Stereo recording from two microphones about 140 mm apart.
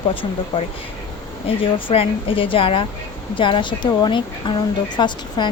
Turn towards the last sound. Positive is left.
turn(degrees=35)  # may be behind; listen again after turning